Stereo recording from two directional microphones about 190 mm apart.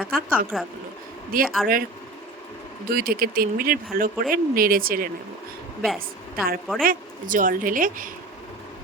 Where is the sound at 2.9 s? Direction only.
50° right (ahead or behind).